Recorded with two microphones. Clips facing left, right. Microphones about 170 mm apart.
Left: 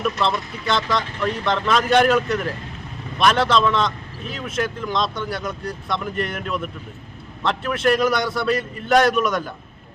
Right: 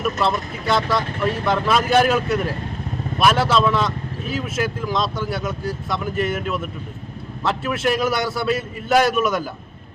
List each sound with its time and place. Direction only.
0.0 s speech: 5° right (ahead or behind)